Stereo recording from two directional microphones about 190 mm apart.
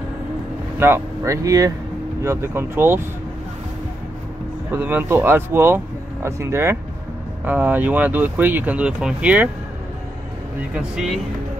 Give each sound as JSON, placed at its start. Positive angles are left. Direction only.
{"t": 0.7, "sound": "speech", "side_deg": -10}
{"t": 4.6, "sound": "speech", "side_deg": -10}
{"t": 10.7, "sound": "speech", "side_deg": 0}